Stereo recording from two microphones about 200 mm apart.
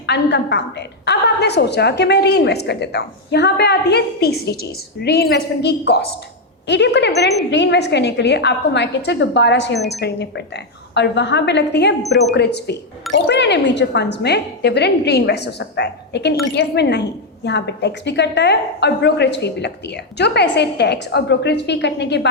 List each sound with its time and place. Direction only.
0.0 s speech: 60° left (ahead or behind)
12.0 s speech: centre (ahead or behind)
12.3 s speech: 55° left (ahead or behind)